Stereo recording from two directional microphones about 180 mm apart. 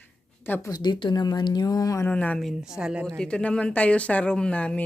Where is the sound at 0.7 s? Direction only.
25° left (ahead or behind).